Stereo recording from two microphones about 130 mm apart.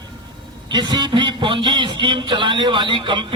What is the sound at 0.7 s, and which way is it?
A man's voice, 35° right (ahead or behind).